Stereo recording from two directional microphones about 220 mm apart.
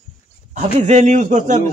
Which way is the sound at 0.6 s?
30° right (ahead or behind).